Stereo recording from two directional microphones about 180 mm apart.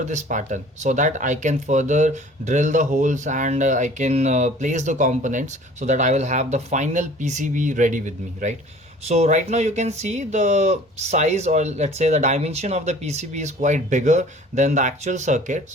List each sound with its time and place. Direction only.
0.0 s speech: 40° right (ahead or behind)